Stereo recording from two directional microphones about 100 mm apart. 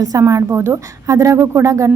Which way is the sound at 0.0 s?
35° right (ahead or behind).